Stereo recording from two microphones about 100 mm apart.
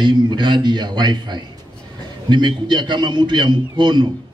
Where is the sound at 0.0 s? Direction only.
50° right (ahead or behind).